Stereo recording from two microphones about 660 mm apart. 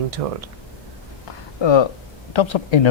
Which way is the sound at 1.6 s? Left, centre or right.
Left.